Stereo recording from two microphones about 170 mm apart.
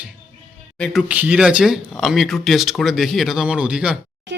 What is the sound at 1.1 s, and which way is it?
Speech, 10° right (ahead or behind).